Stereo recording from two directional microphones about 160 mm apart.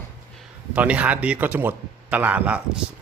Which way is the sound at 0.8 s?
10° right (ahead or behind).